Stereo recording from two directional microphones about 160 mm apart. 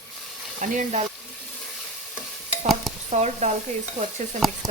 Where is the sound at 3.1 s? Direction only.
45° right (ahead or behind).